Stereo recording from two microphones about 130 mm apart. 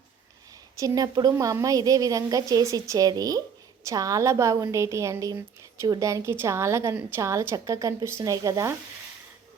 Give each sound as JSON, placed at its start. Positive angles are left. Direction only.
{"t": 0.8, "sound": "a woman's voice", "side_deg": -30}